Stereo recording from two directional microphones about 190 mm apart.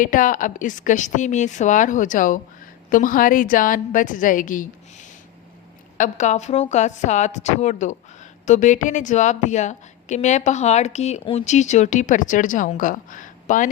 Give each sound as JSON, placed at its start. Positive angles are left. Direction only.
{"t": 0.0, "sound": "a woman's voice", "side_deg": 45}